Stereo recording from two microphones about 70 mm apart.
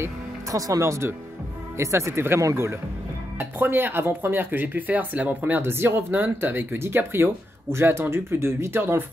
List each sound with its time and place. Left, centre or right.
0.0 s speech: right